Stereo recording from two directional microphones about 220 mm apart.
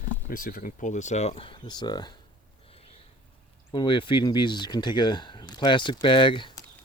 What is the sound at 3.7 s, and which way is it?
Speech, 20° left (ahead or behind).